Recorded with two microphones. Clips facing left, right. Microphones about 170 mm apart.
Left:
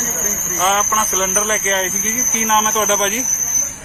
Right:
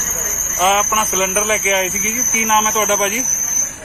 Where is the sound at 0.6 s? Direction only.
15° right (ahead or behind).